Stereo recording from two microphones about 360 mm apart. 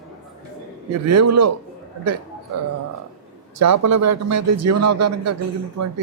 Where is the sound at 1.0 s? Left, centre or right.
Right.